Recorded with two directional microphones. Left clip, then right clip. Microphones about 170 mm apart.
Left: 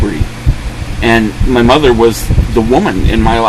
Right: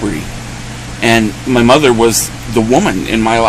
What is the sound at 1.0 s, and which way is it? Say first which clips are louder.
Speech: left 1 dB; 15° right (ahead or behind).